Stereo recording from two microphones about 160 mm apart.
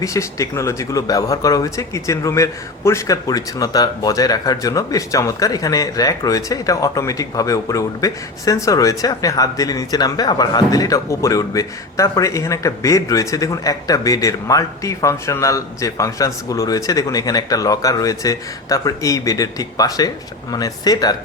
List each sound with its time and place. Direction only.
0.0 s speech: 20° left (ahead or behind)